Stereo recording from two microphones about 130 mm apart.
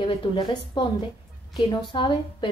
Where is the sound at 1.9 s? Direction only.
40° left (ahead or behind).